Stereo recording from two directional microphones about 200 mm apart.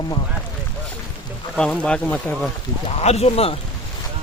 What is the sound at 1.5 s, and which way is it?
Speech, 5° left (ahead or behind).